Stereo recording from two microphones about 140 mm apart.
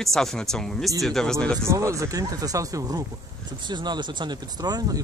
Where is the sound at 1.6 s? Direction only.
20° right (ahead or behind).